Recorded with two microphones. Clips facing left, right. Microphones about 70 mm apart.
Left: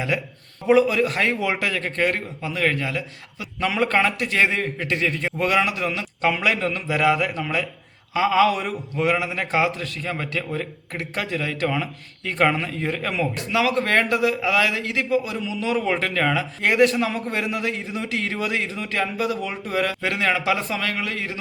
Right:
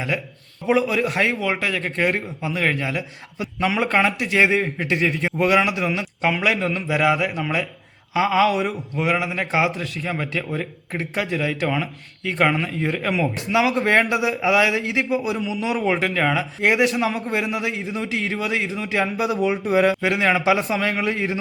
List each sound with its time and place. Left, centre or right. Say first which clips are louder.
0.1 s a man's voice: left 1 dB; centre; by 21.3 s right